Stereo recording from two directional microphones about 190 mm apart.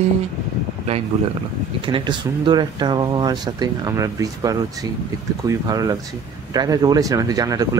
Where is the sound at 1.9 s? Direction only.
25° right (ahead or behind).